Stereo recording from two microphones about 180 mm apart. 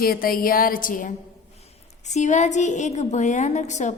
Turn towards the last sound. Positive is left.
turn(degrees=40)  # may be behind; listen again after turning